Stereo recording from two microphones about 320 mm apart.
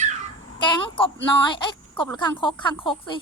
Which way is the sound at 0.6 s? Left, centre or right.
Centre.